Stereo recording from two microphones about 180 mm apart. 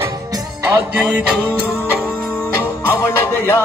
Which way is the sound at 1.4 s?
10° left (ahead or behind).